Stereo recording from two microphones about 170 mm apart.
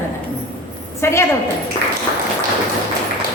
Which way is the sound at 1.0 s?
15° left (ahead or behind).